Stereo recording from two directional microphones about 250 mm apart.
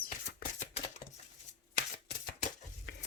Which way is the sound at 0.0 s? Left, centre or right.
Left.